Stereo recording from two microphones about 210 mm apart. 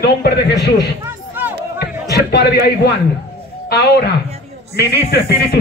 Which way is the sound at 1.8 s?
50° left (ahead or behind).